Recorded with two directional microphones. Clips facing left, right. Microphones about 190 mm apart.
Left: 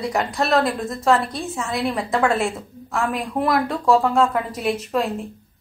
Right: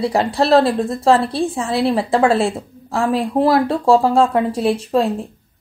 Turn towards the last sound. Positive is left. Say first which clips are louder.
# right 6 dB
turn(degrees=-30)  # may be behind; listen again after turning